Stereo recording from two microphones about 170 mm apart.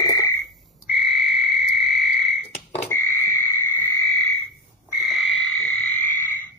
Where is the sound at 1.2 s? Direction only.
Centre (ahead or behind).